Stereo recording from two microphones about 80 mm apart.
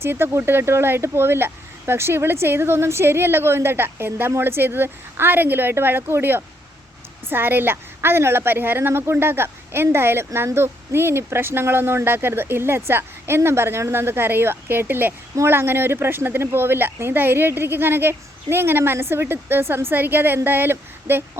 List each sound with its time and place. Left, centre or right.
0.0 s a woman's voice: right